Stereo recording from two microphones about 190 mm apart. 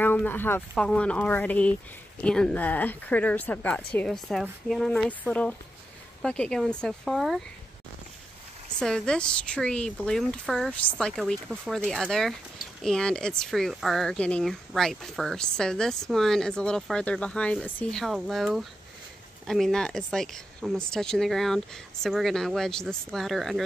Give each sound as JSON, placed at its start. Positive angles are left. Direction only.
{"t": 0.0, "sound": "a woman's voice", "side_deg": 10}
{"t": 8.7, "sound": "speech", "side_deg": 5}